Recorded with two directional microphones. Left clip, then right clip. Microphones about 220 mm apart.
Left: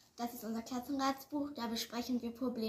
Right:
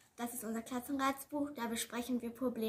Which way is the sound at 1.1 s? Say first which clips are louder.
Even; centre (ahead or behind).